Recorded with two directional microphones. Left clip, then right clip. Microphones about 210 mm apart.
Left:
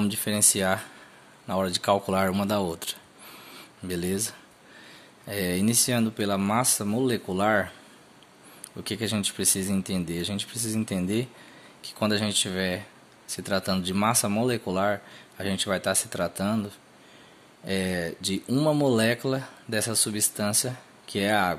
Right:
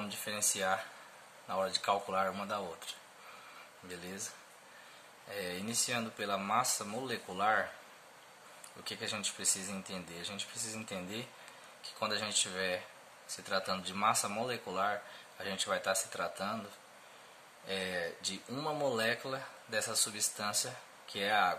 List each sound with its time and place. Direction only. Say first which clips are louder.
0.0 s speech: left 10 dB; 40° left (ahead or behind)
5.3 s speech: left 12 dB; 45° left (ahead or behind)
8.8 s speech: left 9 dB; 40° left (ahead or behind)
17.6 s speech: left 8 dB; 40° left (ahead or behind)